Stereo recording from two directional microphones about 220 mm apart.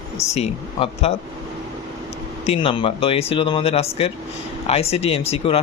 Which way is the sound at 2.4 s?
25° left (ahead or behind).